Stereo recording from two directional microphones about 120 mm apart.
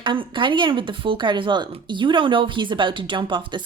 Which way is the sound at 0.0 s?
45° right (ahead or behind).